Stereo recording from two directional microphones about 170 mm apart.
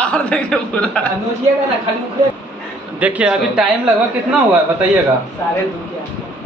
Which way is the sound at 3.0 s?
10° right (ahead or behind).